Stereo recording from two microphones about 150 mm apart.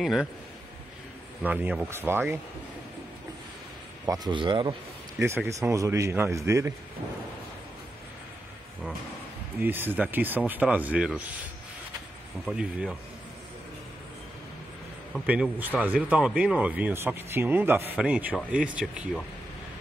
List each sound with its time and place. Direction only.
0.0 s speech: centre (ahead or behind)
1.4 s speech: 10° right (ahead or behind)
4.0 s speech: 25° right (ahead or behind)
5.5 s speech: 20° right (ahead or behind)
9.6 s speech: 15° right (ahead or behind)
12.4 s speech: 5° right (ahead or behind)
15.2 s speech: 10° right (ahead or behind)